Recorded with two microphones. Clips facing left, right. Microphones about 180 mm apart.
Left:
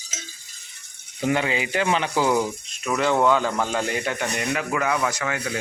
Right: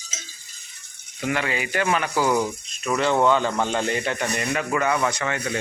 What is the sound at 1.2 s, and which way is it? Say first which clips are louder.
Speech: left 3 dB; 25° left (ahead or behind).